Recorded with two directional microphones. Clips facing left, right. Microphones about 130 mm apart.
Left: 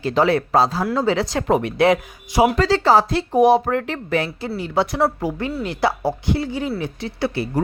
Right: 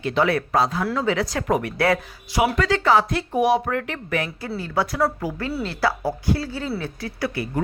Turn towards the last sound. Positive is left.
turn(degrees=30)  # may be behind; listen again after turning